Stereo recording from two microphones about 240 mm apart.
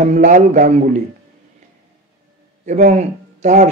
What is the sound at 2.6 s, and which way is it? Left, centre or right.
Speech, right.